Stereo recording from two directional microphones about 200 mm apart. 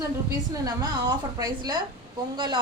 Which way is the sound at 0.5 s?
20° right (ahead or behind).